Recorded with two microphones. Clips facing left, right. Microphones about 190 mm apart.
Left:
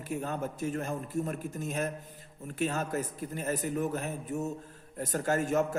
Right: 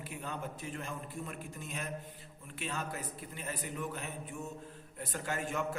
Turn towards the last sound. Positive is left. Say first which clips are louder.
# left 9 dB
turn(degrees=45)  # may be behind; listen again after turning